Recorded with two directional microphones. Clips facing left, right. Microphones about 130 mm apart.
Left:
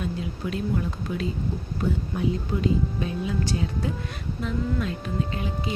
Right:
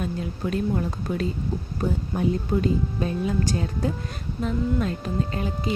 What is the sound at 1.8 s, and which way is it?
Speech, 35° right (ahead or behind).